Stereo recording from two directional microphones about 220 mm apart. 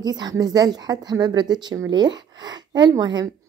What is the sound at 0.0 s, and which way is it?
Speech, 20° right (ahead or behind).